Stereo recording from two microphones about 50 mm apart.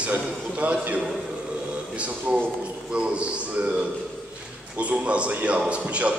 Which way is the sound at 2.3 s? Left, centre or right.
Right.